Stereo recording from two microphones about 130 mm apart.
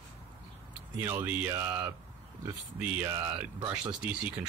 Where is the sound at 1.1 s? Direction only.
15° right (ahead or behind).